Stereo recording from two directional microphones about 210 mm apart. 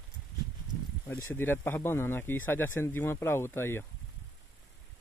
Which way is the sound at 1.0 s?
10° left (ahead or behind).